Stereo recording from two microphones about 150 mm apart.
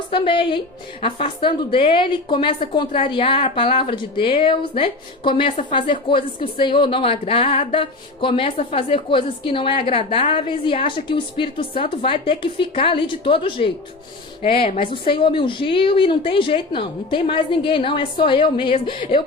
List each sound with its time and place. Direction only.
0.1 s speech: 35° left (ahead or behind)